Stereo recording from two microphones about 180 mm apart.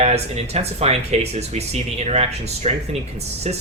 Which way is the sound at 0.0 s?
35° right (ahead or behind).